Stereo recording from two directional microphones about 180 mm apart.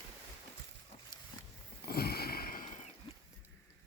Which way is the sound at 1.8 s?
60° left (ahead or behind).